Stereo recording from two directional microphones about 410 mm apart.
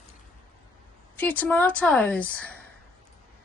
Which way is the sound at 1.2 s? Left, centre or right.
Centre.